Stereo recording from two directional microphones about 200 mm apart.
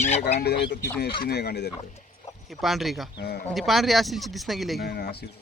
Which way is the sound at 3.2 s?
50° left (ahead or behind).